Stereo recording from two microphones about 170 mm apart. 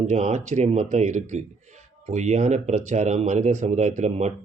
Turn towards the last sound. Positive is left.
turn(degrees=-45)  # may be behind; listen again after turning